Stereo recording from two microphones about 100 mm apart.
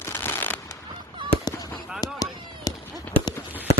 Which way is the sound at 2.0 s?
40° left (ahead or behind).